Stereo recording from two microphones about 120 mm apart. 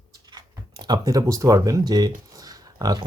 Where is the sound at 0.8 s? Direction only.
35° right (ahead or behind).